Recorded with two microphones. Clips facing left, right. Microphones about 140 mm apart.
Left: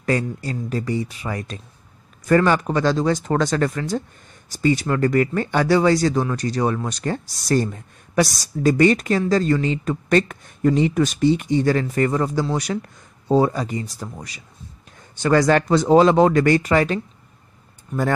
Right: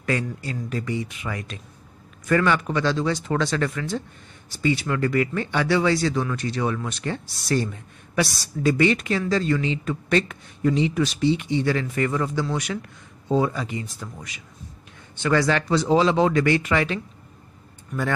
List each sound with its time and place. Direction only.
0.0 s speech: 35° left (ahead or behind)